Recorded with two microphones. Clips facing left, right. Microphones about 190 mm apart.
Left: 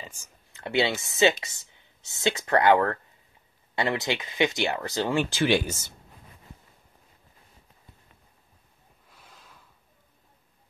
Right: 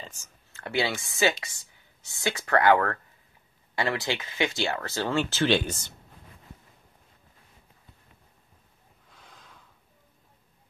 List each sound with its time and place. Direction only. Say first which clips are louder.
0.0 s speech: even; 10° left (ahead or behind)
9.1 s snort: right 1 dB; 5° left (ahead or behind)